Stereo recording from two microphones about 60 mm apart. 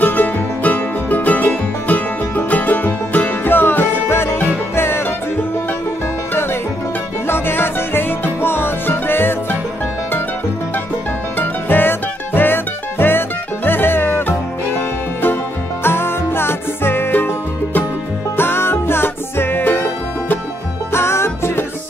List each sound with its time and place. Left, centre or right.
0.0 s music: left
7.2 s music: left
11.3 s music: left
15.8 s music: left
18.3 s music: left
20.9 s music: left